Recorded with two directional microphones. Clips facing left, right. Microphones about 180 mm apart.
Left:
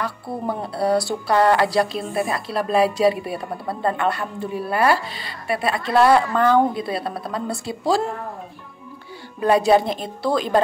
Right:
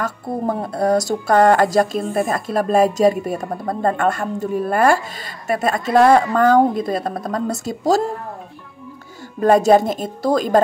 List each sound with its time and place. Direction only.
0.0 s speech: 45° right (ahead or behind)
9.4 s speech: 45° right (ahead or behind)